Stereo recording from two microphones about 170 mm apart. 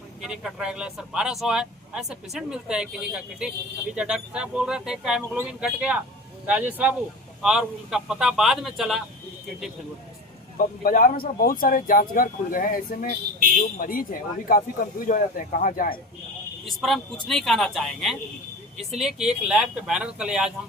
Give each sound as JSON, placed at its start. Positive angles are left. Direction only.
{"t": 0.2, "sound": "speech", "side_deg": -5}
{"t": 10.6, "sound": "speech", "side_deg": 55}
{"t": 16.6, "sound": "speech", "side_deg": 0}